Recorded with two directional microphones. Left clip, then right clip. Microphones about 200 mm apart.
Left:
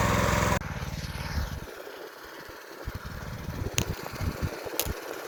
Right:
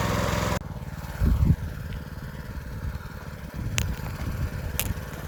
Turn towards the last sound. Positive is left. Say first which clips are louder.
# left 2 dB
turn(degrees=-50)  # may be behind; listen again after turning